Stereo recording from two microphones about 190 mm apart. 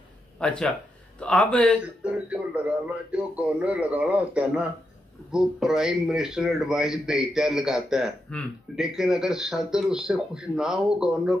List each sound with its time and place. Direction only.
0.4 s speech: 5° left (ahead or behind)
2.0 s a man's voice: 5° right (ahead or behind)